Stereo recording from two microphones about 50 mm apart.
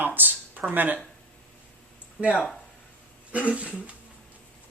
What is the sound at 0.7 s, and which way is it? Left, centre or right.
Speech, right.